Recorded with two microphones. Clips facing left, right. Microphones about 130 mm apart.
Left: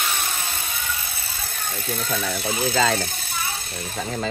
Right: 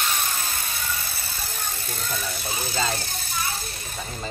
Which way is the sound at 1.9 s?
55° left (ahead or behind).